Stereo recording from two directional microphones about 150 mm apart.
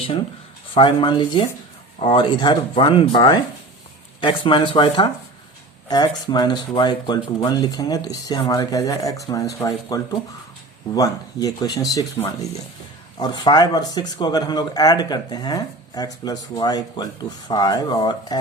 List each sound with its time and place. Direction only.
0.7 s speech: 35° left (ahead or behind)